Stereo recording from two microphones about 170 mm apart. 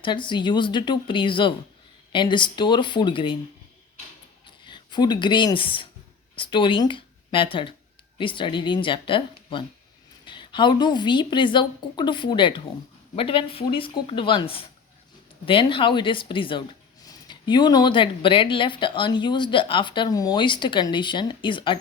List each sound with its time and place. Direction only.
0.0 s speech: 30° left (ahead or behind)
4.4 s speech: 25° left (ahead or behind)